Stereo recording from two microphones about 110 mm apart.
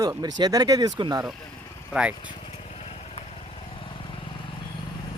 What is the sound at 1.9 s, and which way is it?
Speech, 10° right (ahead or behind).